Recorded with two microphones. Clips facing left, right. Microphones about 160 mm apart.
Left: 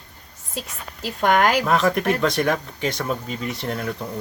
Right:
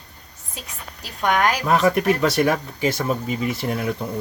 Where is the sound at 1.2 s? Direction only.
50° left (ahead or behind).